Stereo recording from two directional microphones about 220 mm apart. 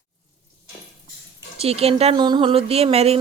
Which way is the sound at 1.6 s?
25° right (ahead or behind).